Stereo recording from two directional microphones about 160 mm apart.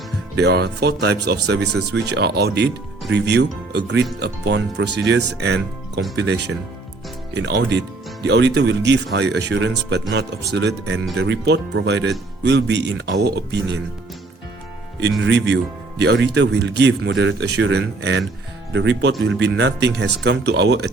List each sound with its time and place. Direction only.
0.3 s speech: 90° right
16.0 s speech: 90° right
19.4 s speech: 90° right